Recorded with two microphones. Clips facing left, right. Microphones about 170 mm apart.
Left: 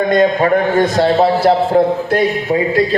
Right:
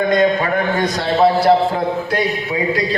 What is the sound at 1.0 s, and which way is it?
A man's voice, 45° left (ahead or behind).